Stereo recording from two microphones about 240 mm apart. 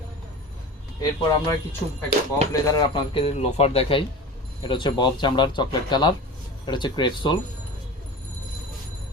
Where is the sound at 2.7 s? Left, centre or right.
Left.